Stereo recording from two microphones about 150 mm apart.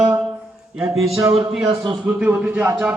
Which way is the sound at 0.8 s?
20° right (ahead or behind).